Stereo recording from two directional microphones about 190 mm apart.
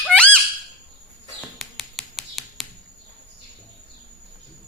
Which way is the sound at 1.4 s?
Centre (ahead or behind).